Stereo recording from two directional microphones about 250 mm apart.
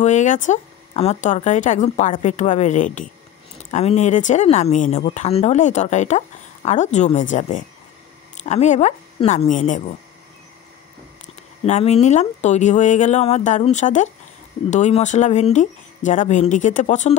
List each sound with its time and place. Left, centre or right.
0.0 s speech: left
11.6 s speech: left